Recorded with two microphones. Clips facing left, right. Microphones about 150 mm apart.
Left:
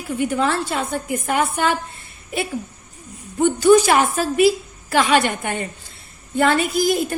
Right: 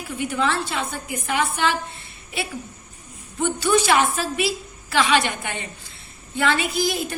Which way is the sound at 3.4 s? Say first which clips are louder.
Left 7 dB; 45° left (ahead or behind).